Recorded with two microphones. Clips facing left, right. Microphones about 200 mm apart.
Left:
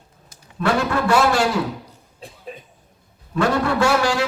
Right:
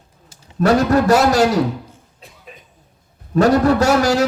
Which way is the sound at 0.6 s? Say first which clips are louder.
Right 6 dB; 40° right (ahead or behind).